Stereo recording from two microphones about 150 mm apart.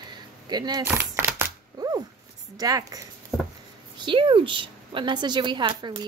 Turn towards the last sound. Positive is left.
turn(degrees=-30)  # may be behind; listen again after turning